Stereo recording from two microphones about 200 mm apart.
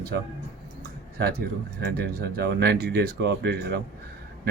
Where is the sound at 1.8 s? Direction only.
55° right (ahead or behind).